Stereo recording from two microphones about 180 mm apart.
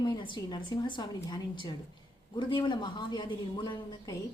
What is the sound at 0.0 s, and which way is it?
A woman's voice, 25° left (ahead or behind).